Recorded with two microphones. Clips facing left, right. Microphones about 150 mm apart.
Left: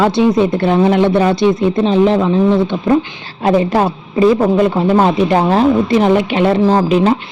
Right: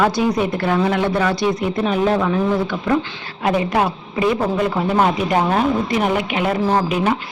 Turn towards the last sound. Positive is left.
turn(degrees=25)  # may be behind; listen again after turning